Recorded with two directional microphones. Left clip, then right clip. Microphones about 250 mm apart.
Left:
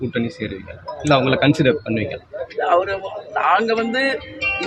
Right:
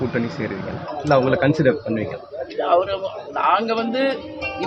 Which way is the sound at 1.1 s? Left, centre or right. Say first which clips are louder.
Left 1 dB; left.